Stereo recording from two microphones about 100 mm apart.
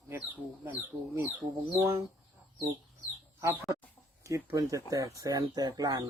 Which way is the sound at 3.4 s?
30° right (ahead or behind).